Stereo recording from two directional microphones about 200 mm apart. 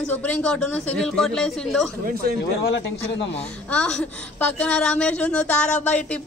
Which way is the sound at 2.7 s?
65° left (ahead or behind).